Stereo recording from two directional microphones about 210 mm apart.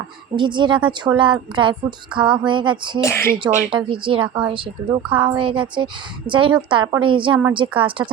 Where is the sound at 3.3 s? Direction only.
20° right (ahead or behind).